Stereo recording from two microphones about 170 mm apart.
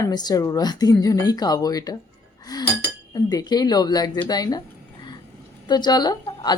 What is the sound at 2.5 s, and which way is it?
Chink, 20° left (ahead or behind).